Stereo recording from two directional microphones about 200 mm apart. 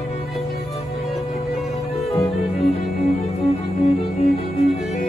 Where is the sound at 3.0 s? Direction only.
30° left (ahead or behind).